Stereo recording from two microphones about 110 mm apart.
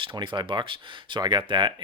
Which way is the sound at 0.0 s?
50° right (ahead or behind).